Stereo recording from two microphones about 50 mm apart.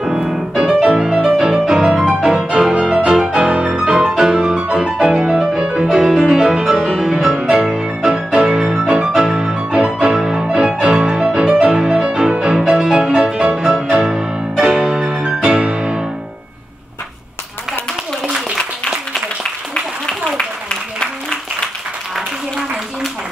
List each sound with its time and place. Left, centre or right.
0.0 s music: centre
3.4 s music: right
18.3 s a sound: centre